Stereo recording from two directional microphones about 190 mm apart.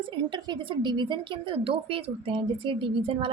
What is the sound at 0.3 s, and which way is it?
A woman's voice, 20° right (ahead or behind).